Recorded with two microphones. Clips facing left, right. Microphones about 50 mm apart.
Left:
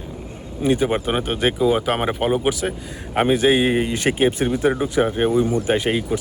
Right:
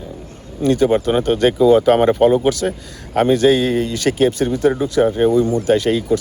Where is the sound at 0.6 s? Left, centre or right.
Centre.